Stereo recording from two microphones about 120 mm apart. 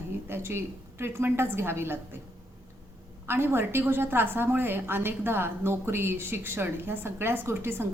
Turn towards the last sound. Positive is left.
turn(degrees=-20)  # may be behind; listen again after turning